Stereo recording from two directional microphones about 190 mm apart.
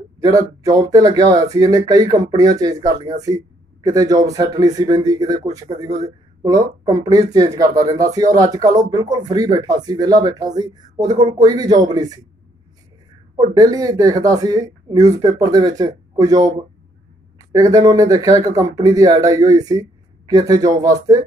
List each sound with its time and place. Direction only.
0.2 s speech: 20° right (ahead or behind)
13.5 s speech: 20° right (ahead or behind)